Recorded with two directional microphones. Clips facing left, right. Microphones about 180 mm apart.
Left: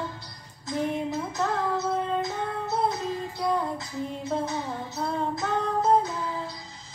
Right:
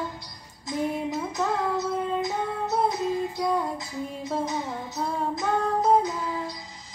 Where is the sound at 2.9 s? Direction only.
15° right (ahead or behind).